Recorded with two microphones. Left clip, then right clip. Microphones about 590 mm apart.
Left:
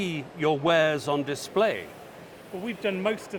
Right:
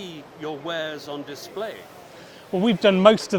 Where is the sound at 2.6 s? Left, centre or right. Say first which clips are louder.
Right 12 dB; right.